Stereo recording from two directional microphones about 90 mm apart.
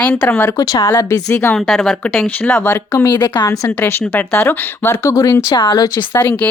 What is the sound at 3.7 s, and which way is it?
Speech, 20° left (ahead or behind).